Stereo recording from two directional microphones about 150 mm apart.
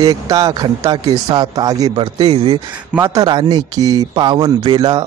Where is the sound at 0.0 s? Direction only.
25° right (ahead or behind).